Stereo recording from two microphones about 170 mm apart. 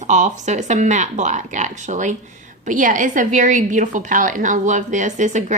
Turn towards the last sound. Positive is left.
turn(degrees=-45)  # may be behind; listen again after turning